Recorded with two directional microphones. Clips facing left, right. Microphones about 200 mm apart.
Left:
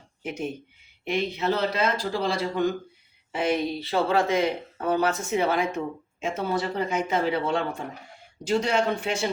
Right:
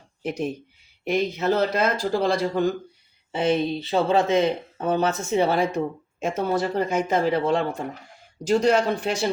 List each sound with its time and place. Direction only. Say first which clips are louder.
0.2 s speech: right 4 dB; 35° right (ahead or behind)
3.3 s speech: right 3 dB; 25° right (ahead or behind)